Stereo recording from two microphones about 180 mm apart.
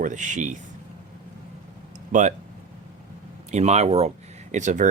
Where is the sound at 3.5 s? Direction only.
35° right (ahead or behind).